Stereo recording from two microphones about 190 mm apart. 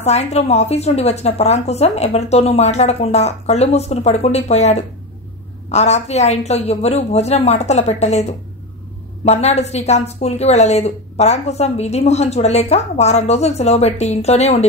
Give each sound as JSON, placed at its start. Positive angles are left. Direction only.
{"t": 0.0, "sound": "a woman's voice", "side_deg": 35}